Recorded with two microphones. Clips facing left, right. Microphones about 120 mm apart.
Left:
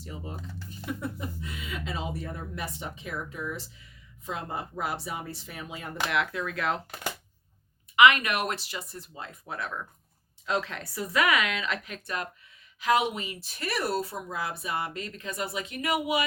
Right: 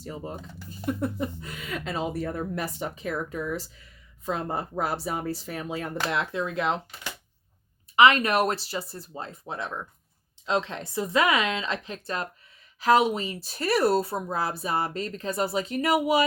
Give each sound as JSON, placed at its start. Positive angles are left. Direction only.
{"t": 0.0, "sound": "speech", "side_deg": -40}
{"t": 2.6, "sound": "speech", "side_deg": -40}
{"t": 6.1, "sound": "a woman's voice", "side_deg": -25}
{"t": 7.9, "sound": "a woman's voice", "side_deg": -35}